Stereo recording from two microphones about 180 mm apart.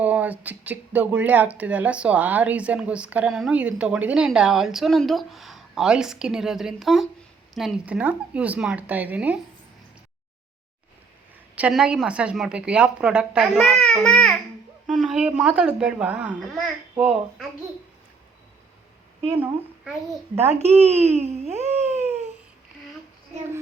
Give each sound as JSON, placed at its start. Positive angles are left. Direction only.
{"t": 0.0, "sound": "a woman's voice", "side_deg": -10}
{"t": 11.5, "sound": "speech", "side_deg": -5}
{"t": 20.7, "sound": "a sound", "side_deg": -35}